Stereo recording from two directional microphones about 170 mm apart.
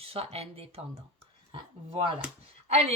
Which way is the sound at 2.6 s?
40° right (ahead or behind).